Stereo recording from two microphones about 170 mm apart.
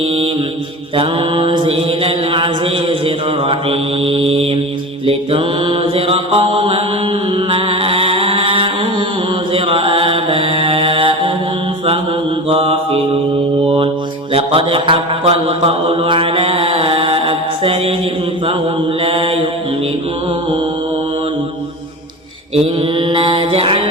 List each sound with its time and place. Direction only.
0.9 s mantra: 30° right (ahead or behind)
12.5 s mantra: 35° right (ahead or behind)
19.0 s mantra: 35° right (ahead or behind)
22.5 s mantra: 30° right (ahead or behind)